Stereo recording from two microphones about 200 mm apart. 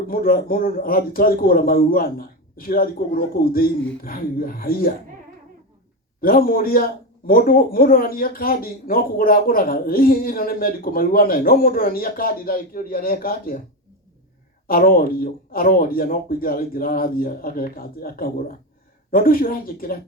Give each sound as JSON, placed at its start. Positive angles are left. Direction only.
{"t": 0.1, "sound": "speech", "side_deg": 45}
{"t": 6.1, "sound": "speech", "side_deg": 45}
{"t": 14.7, "sound": "speech", "side_deg": 45}